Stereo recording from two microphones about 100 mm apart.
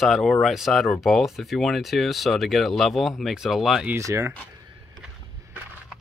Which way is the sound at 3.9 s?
30° right (ahead or behind).